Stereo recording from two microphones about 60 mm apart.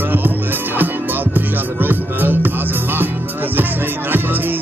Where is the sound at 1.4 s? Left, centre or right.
Right.